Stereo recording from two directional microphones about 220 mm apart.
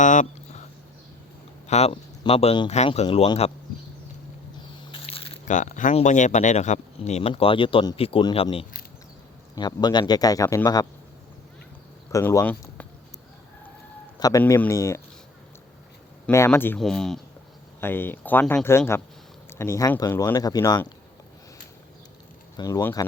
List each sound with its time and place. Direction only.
0.0 s a sound: 35° left (ahead or behind)
1.6 s speech: 30° left (ahead or behind)
4.9 s speech: 25° left (ahead or behind)
12.1 s speech: 15° left (ahead or behind)
14.2 s speech: 15° left (ahead or behind)
16.2 s speech: 10° left (ahead or behind)
22.5 s speech: 15° left (ahead or behind)